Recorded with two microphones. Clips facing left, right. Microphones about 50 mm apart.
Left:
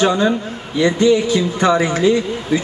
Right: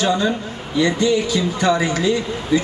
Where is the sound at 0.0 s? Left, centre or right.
Left.